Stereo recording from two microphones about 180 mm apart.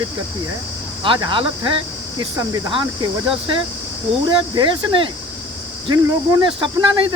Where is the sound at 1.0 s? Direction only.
25° right (ahead or behind).